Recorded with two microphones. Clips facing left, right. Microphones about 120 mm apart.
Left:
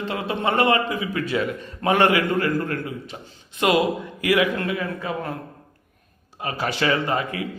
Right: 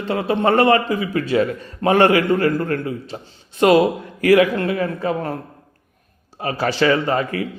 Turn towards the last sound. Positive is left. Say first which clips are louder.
# right 4 dB
turn(degrees=-35)  # may be behind; listen again after turning